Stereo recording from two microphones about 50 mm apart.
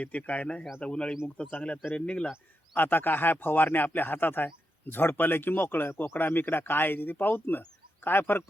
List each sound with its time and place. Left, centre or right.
0.0 s speech: left
2.7 s speech: left